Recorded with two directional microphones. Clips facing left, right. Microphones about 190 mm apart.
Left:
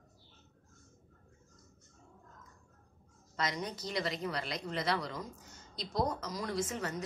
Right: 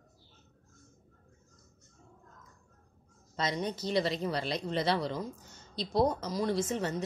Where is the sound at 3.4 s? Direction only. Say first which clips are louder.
Right 4 dB; 25° right (ahead or behind).